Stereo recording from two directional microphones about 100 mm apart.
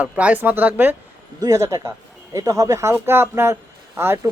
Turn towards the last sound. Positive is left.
turn(degrees=-25)  # may be behind; listen again after turning